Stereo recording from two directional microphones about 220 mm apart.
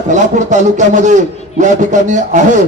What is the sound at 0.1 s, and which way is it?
A man's voice, 35° right (ahead or behind).